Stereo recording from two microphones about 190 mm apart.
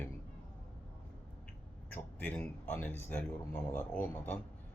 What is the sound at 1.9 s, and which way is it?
Speech, 10° left (ahead or behind).